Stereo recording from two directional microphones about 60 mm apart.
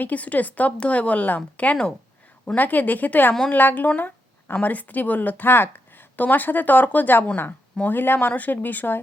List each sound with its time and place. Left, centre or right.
0.0 s a woman's voice: left
2.6 s a woman's voice: left
3.8 s a sound: left
4.6 s a woman's voice: left